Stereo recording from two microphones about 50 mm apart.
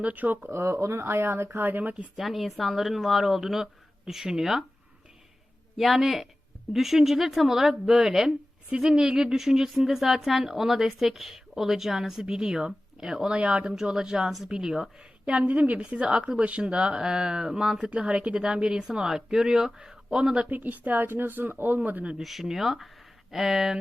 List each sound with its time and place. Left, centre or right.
0.0 s speech: right
0.4 s speech: right
1.5 s speech: right
2.1 s speech: centre
5.7 s a woman's voice: centre
13.3 s a woman's voice: right
15.3 s a woman's voice: right
15.8 s a woman's voice: centre
20.5 s speech: right
22.2 s a woman's voice: centre